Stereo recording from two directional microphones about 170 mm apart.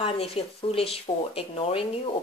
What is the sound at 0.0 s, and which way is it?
Speech, 35° left (ahead or behind).